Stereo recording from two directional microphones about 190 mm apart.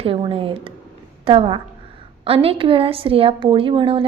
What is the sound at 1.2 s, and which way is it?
A woman's voice, 30° right (ahead or behind).